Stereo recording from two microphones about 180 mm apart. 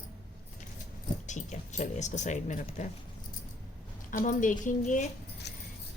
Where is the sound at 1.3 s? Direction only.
40° left (ahead or behind).